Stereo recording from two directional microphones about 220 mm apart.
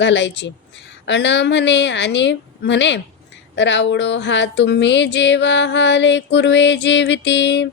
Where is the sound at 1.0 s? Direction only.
55° left (ahead or behind).